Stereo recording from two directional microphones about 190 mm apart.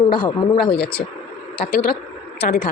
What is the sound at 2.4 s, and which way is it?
Speech, 55° left (ahead or behind).